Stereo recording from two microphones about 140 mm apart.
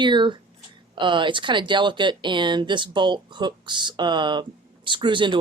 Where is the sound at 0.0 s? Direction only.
35° right (ahead or behind).